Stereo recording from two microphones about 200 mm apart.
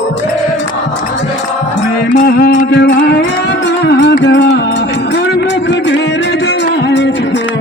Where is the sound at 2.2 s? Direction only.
55° left (ahead or behind).